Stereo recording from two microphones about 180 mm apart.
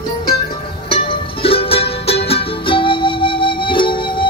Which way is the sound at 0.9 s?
30° left (ahead or behind).